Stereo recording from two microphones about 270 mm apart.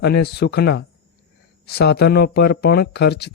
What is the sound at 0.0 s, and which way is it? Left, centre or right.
Speech, left.